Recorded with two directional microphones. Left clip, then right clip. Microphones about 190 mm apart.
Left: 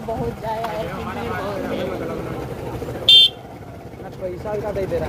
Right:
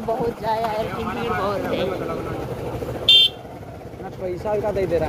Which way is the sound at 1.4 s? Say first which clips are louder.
Right 3 dB; 20° right (ahead or behind).